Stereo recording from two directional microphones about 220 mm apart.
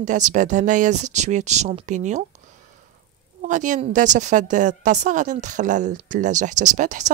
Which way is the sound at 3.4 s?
35° right (ahead or behind).